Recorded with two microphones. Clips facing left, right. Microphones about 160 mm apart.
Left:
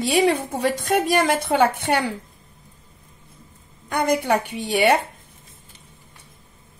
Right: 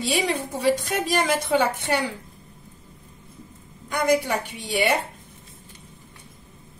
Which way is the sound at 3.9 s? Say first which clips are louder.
Left 2 dB; 60° left (ahead or behind).